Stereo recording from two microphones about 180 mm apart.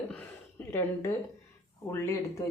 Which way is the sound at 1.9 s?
15° left (ahead or behind).